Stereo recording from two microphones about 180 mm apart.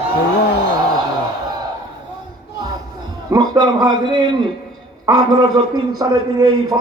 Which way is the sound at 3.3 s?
20° right (ahead or behind).